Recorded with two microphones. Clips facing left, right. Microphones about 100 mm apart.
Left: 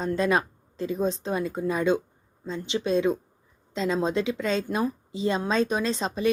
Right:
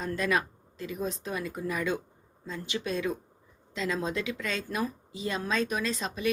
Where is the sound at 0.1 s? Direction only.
30° left (ahead or behind).